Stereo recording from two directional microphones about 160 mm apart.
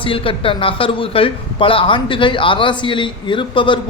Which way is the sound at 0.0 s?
35° left (ahead or behind).